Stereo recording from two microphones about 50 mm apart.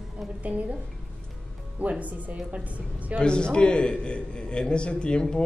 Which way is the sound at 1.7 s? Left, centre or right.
Right.